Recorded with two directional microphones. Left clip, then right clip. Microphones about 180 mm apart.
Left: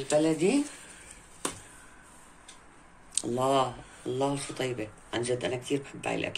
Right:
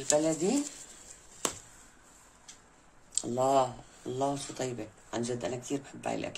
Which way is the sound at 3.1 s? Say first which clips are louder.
Even; 40° right (ahead or behind).